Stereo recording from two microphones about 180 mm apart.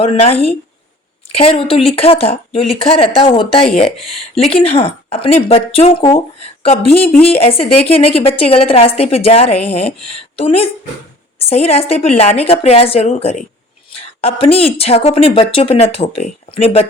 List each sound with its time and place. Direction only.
0.0 s speech: 35° left (ahead or behind)